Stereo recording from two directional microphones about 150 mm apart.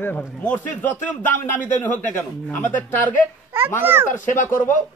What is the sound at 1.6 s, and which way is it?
Speech, 60° left (ahead or behind).